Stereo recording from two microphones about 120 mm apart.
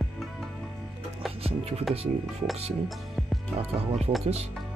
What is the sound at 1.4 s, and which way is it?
Music, 55° right (ahead or behind).